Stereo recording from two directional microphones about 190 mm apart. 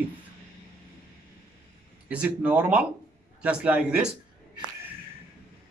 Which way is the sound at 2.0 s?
5° right (ahead or behind).